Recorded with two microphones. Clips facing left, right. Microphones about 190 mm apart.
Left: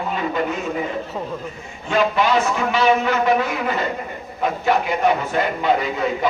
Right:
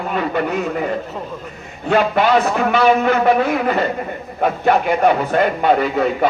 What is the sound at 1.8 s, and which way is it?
A man's voice, 60° right (ahead or behind).